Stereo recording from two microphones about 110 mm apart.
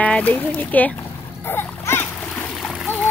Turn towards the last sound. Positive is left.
turn(degrees=20)  # may be behind; listen again after turning